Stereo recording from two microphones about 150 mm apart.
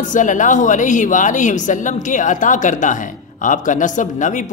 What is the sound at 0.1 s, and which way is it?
Speech, 60° left (ahead or behind).